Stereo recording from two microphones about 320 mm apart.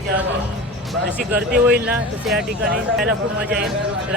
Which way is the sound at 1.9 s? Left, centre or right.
Centre.